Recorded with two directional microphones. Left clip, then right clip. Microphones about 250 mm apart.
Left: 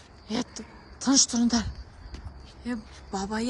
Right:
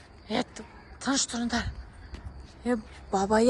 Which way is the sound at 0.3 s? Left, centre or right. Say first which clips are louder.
Right 2 dB; centre.